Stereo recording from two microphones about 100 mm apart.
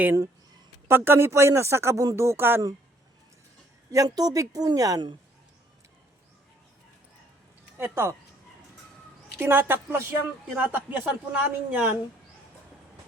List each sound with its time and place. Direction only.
0.9 s speech: 20° right (ahead or behind)
3.9 s a woman's voice: 40° right (ahead or behind)
7.8 s speech: 25° right (ahead or behind)
9.4 s a man's voice: 20° right (ahead or behind)